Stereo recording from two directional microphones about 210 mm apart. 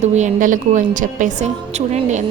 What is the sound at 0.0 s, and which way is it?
A woman's voice, 35° right (ahead or behind).